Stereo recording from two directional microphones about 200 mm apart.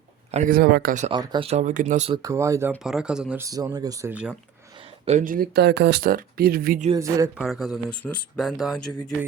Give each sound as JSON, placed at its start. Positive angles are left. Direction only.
{"t": 0.3, "sound": "speech", "side_deg": -40}
{"t": 1.1, "sound": "speech", "side_deg": -20}
{"t": 2.2, "sound": "speech", "side_deg": -15}
{"t": 2.8, "sound": "speech", "side_deg": -5}
{"t": 3.4, "sound": "speech", "side_deg": -20}
{"t": 4.1, "sound": "speech", "side_deg": -5}
{"t": 5.0, "sound": "speech", "side_deg": -40}
{"t": 6.9, "sound": "speech", "side_deg": -15}
{"t": 7.3, "sound": "speech", "side_deg": 0}